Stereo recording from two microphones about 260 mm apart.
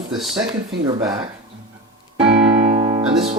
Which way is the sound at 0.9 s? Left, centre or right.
Centre.